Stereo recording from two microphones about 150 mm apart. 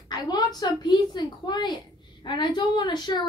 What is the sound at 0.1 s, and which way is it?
Speech, 25° left (ahead or behind).